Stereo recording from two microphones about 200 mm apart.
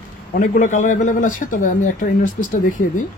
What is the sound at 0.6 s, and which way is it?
Speech, 40° left (ahead or behind).